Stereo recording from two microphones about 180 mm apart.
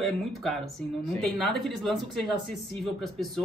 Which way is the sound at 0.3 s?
Centre (ahead or behind).